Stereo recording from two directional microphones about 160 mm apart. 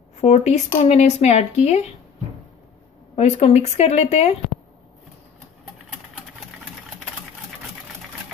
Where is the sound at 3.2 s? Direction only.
40° left (ahead or behind).